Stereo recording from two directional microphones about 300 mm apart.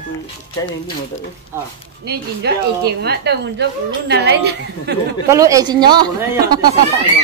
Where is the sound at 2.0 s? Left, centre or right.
Right.